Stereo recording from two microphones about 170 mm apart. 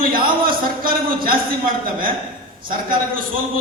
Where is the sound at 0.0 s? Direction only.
55° right (ahead or behind).